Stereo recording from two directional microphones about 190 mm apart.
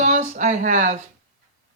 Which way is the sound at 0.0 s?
40° right (ahead or behind).